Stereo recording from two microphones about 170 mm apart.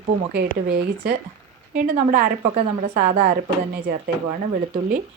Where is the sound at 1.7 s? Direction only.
50° right (ahead or behind).